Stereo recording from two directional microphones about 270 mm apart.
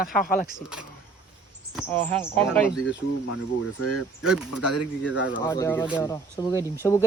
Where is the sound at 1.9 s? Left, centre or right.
Centre.